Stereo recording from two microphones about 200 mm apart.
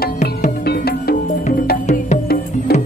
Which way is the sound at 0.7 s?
50° left (ahead or behind).